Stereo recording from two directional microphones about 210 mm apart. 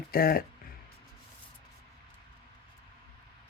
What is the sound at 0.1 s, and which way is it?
Speech, 45° left (ahead or behind).